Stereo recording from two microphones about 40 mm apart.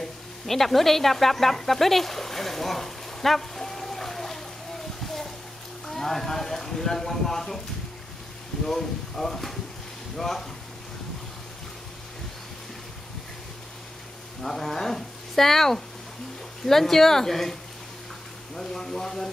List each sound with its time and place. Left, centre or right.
0.0 s sizzle: centre
5.0 s a sound: centre
5.9 s speech: centre
8.6 s speech: centre
14.4 s speech: centre
18.6 s speech: centre